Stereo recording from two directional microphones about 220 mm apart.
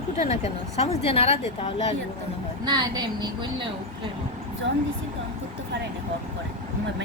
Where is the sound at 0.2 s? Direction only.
30° left (ahead or behind).